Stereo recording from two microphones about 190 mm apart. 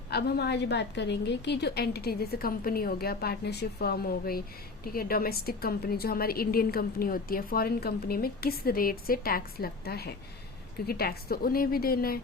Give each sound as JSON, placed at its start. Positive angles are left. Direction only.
{"t": 0.1, "sound": "a woman's voice", "side_deg": 55}